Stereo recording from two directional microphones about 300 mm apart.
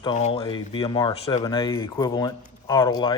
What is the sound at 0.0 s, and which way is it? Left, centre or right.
Speech, centre.